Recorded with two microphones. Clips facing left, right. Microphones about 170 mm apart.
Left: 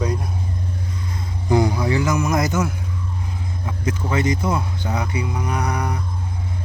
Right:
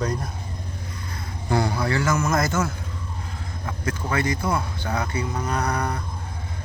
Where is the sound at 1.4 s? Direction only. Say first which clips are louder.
Left 4 dB; 15° left (ahead or behind).